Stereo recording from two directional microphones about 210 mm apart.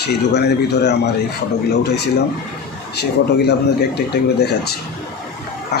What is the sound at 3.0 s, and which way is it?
Speech, 50° left (ahead or behind).